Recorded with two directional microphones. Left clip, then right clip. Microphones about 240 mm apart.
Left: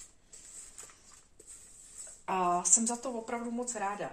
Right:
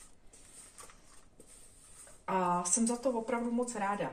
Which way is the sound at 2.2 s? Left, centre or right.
Left.